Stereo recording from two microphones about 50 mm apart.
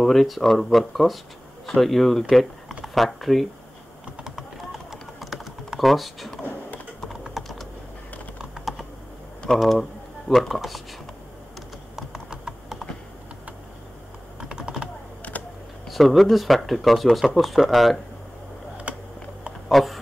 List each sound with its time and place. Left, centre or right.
0.0 s speech: centre
5.2 s typing: centre
9.6 s speech: centre
11.9 s typing: centre
14.4 s typing: centre
15.3 s computer keyboard: left
15.9 s speech: centre
18.9 s typing: right
19.7 s a sound: centre